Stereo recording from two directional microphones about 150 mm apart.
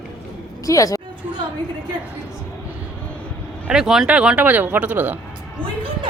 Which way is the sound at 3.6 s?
5° right (ahead or behind).